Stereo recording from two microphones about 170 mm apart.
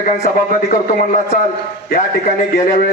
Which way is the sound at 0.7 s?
45° left (ahead or behind).